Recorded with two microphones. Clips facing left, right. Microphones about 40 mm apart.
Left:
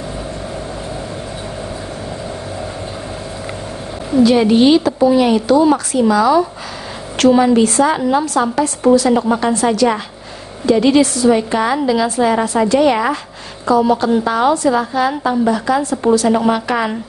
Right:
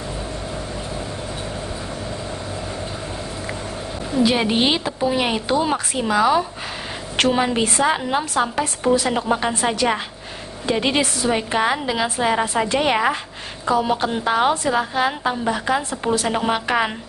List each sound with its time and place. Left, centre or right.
4.2 s a woman's voice: right